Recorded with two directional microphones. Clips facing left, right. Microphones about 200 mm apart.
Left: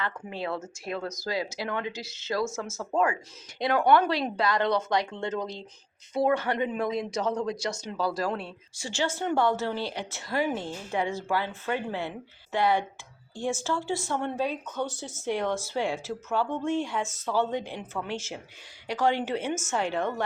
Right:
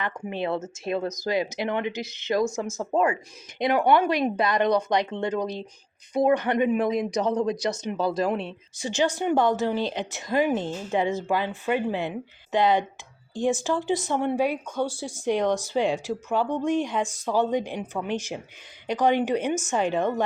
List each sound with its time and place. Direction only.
0.0 s speech: 20° right (ahead or behind)